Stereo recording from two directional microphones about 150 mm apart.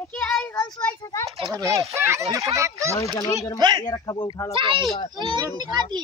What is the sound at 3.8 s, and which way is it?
Speech, 25° left (ahead or behind).